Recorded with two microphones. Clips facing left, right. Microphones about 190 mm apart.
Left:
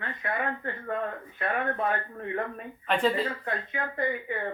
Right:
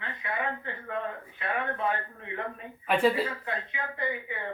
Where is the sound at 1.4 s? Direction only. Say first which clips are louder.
Left 3 dB; 50° left (ahead or behind).